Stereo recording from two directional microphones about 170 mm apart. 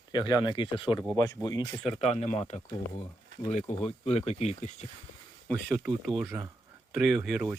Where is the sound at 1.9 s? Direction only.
40° left (ahead or behind).